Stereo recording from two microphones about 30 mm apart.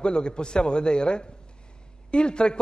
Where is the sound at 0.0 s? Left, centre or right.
Left.